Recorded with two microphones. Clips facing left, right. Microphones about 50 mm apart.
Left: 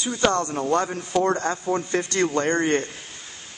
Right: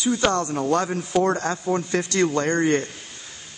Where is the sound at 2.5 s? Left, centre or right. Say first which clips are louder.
Right 1 dB; left.